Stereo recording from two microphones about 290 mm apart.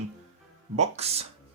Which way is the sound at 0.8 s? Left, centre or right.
Right.